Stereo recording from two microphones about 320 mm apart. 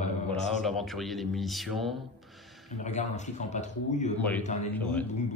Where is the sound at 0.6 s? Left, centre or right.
Centre.